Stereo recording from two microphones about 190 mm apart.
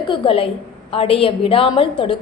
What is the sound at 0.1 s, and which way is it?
A woman's voice, 30° left (ahead or behind).